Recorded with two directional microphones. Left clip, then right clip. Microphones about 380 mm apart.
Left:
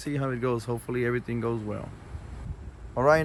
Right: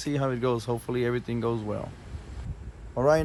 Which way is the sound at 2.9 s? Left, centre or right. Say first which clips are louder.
Left 1 dB; centre.